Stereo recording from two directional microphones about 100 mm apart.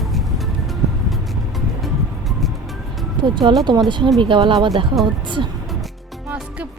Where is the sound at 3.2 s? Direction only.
50° right (ahead or behind).